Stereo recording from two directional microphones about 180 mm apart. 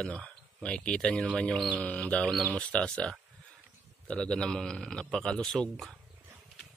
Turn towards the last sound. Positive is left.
turn(degrees=0)  # may be behind; listen again after turning